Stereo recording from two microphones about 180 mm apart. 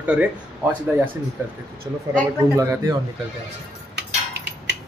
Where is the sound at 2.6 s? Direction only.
15° right (ahead or behind).